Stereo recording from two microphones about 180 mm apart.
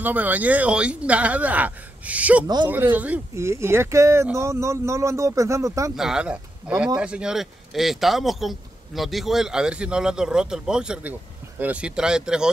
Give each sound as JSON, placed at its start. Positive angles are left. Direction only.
{"t": 0.0, "sound": "speech", "side_deg": -10}
{"t": 2.4, "sound": "speech", "side_deg": -25}
{"t": 2.7, "sound": "speech", "side_deg": -10}
{"t": 5.9, "sound": "speech", "side_deg": -5}